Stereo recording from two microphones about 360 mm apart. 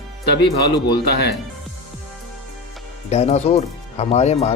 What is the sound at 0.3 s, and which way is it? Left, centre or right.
Speech, left.